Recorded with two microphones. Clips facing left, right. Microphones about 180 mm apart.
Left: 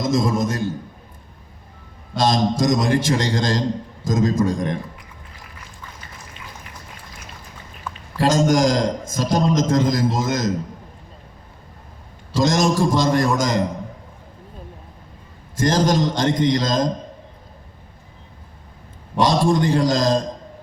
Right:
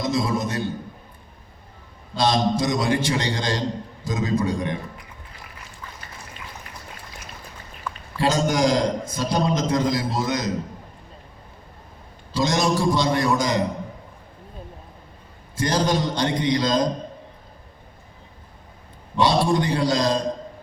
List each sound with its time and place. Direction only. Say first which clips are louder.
0.0 s a man's voice: left 4 dB; 45° left (ahead or behind)
2.1 s a man's voice: left 2 dB; 45° left (ahead or behind)
8.2 s a man's voice: left 4 dB; 45° left (ahead or behind)
12.3 s a man's voice: left 3 dB; 45° left (ahead or behind)
15.5 s a man's voice: left 4 dB; 45° left (ahead or behind)
19.2 s a man's voice: left 2 dB; 45° left (ahead or behind)